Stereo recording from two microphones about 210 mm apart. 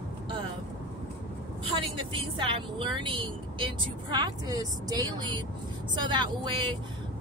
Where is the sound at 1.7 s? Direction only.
25° right (ahead or behind).